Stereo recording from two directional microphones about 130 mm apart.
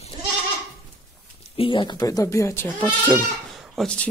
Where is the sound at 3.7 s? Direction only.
10° left (ahead or behind).